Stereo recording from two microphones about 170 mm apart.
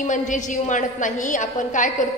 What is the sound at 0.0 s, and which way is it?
A woman's voice, 50° left (ahead or behind).